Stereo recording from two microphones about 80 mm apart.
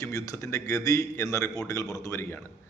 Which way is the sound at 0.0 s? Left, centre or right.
Left.